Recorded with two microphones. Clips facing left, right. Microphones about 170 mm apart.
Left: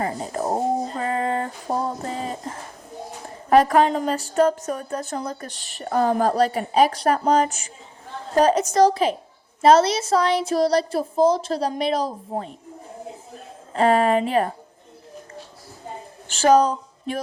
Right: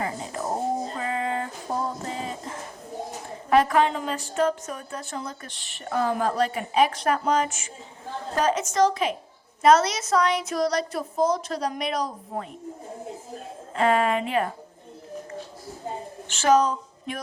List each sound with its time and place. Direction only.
0.0 s a sound: 40° left (ahead or behind)
0.9 s music: 40° left (ahead or behind)
3.5 s a woman's voice: 40° left (ahead or behind)
13.7 s a woman's voice: 35° left (ahead or behind)
16.3 s speech: 35° left (ahead or behind)